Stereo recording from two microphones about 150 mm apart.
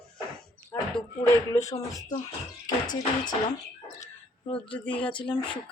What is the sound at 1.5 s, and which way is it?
Speech, 20° left (ahead or behind).